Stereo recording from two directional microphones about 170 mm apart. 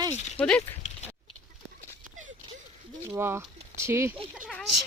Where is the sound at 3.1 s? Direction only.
15° right (ahead or behind).